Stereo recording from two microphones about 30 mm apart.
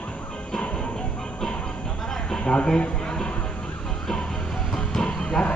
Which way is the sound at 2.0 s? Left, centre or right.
Centre.